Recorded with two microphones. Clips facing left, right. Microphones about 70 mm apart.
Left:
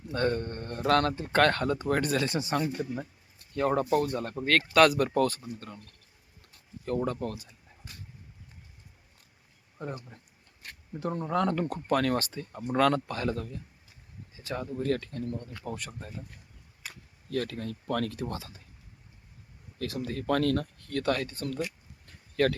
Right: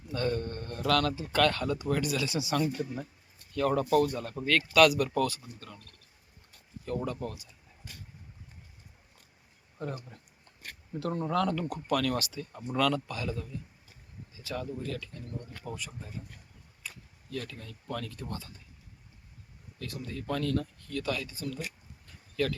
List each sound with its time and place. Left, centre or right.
0.1 s speech: left
2.5 s speech: left
4.1 s speech: left
6.8 s speech: left
9.7 s speech: centre
11.4 s speech: left
14.3 s speech: left
14.8 s speech: left
16.8 s speech: left
19.8 s speech: left
22.0 s a sound: left